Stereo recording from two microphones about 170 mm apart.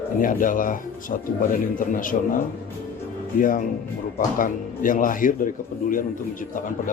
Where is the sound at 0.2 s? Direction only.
55° left (ahead or behind).